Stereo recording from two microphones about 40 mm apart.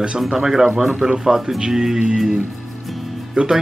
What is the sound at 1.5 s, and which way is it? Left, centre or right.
Speech, centre.